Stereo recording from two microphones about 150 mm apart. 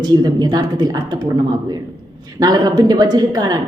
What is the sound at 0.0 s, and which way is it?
A woman's voice, 25° right (ahead or behind).